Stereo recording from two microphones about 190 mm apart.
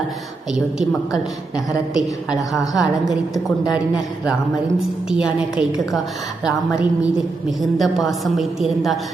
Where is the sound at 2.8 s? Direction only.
Centre (ahead or behind).